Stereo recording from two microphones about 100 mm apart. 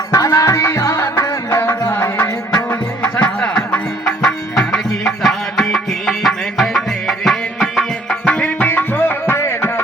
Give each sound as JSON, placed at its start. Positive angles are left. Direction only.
{"t": 0.1, "sound": "music", "side_deg": 35}
{"t": 8.2, "sound": "music", "side_deg": 15}